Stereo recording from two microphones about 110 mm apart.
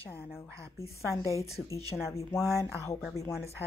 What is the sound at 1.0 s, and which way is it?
Speech, 30° left (ahead or behind).